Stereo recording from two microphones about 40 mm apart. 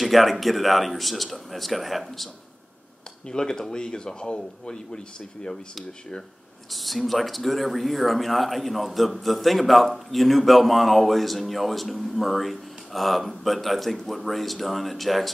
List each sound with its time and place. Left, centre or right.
0.0 s speech: centre
3.3 s speech: centre
6.7 s speech: centre